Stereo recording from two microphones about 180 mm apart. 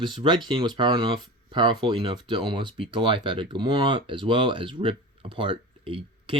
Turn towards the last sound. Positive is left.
turn(degrees=-30)  # may be behind; listen again after turning